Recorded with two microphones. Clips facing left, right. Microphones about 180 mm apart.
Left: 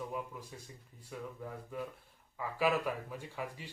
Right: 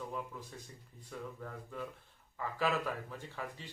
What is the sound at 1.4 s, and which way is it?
Speech, 10° left (ahead or behind).